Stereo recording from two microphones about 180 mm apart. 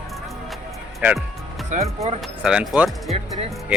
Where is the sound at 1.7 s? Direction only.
40° right (ahead or behind).